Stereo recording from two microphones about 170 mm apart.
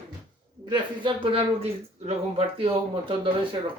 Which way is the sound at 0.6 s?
25° right (ahead or behind).